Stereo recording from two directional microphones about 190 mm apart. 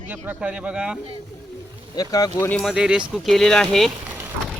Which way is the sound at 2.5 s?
Centre (ahead or behind).